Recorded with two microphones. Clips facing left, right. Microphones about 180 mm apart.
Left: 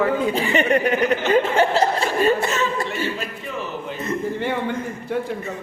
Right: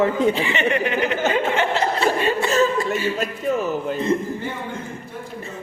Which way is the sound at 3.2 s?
45° right (ahead or behind).